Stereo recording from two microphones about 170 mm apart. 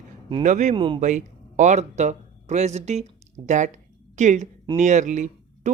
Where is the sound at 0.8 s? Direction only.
30° right (ahead or behind).